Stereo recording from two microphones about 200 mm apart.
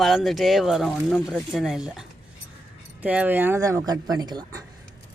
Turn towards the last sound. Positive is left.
turn(degrees=-20)  # may be behind; listen again after turning